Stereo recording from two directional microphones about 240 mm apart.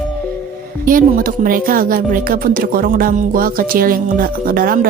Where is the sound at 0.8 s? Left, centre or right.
Right.